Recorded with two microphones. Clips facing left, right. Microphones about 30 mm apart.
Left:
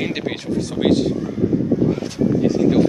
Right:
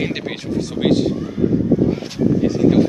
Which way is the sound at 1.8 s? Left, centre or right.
Centre.